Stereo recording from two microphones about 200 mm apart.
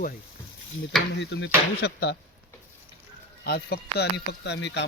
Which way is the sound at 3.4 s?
50° left (ahead or behind).